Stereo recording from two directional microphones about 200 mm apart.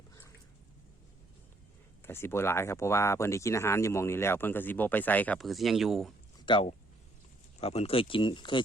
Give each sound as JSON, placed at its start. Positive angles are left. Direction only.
{"t": 2.0, "sound": "speech", "side_deg": 10}
{"t": 6.4, "sound": "speech", "side_deg": 25}